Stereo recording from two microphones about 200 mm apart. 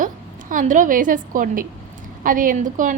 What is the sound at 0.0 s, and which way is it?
A woman's voice, 40° right (ahead or behind).